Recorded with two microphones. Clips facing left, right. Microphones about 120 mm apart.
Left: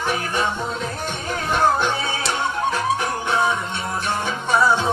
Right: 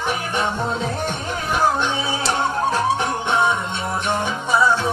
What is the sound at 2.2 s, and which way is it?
Music, 30° right (ahead or behind).